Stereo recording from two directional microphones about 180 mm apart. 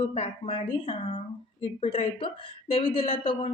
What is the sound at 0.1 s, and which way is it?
Speech, 30° left (ahead or behind).